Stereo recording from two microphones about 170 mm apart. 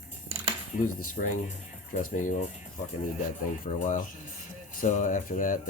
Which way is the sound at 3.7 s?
45° left (ahead or behind).